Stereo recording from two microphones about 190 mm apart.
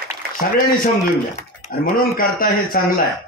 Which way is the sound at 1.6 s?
45° left (ahead or behind).